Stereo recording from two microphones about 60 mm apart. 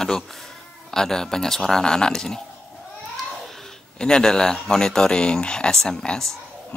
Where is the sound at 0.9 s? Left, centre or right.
Centre.